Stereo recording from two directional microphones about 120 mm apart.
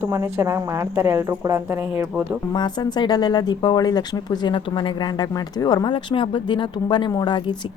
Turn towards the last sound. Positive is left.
turn(degrees=35)  # may be behind; listen again after turning